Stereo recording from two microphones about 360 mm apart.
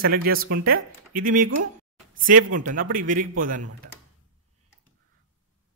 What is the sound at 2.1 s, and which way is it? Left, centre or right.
Speech, right.